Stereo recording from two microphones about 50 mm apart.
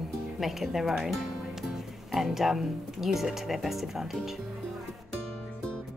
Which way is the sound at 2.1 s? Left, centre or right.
Centre.